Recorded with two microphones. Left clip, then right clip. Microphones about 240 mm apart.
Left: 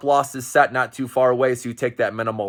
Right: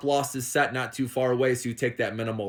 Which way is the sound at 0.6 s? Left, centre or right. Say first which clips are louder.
Left 8 dB; left.